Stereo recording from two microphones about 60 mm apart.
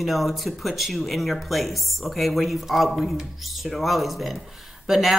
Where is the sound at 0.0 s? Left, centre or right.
Centre.